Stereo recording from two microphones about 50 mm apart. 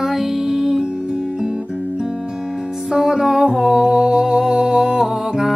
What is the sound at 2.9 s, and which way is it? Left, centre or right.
Music, centre.